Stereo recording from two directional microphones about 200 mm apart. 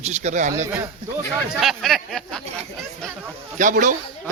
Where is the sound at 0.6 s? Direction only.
15° right (ahead or behind).